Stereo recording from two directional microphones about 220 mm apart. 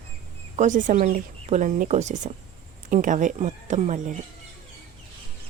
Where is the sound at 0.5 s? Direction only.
35° right (ahead or behind).